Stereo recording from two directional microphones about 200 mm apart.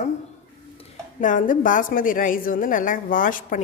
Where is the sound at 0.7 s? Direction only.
40° left (ahead or behind).